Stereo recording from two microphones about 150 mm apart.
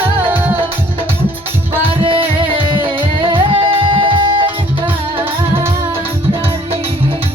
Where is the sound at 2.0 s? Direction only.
35° right (ahead or behind).